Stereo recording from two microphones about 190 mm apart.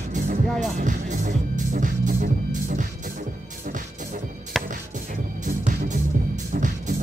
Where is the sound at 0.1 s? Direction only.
40° right (ahead or behind).